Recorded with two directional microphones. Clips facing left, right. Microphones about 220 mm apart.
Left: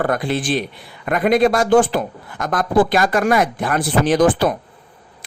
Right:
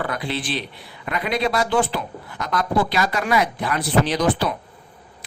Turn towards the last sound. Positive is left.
turn(degrees=50)  # may be behind; listen again after turning